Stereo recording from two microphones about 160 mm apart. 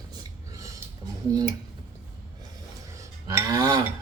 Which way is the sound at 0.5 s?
20° right (ahead or behind).